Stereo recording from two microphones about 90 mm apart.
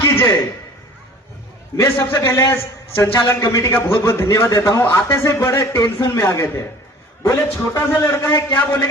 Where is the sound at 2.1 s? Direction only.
35° left (ahead or behind).